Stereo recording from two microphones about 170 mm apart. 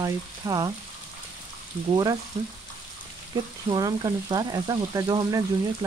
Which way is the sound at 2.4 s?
30° right (ahead or behind).